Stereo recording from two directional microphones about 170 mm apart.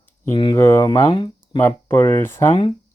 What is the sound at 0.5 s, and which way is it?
Speech, 15° left (ahead or behind).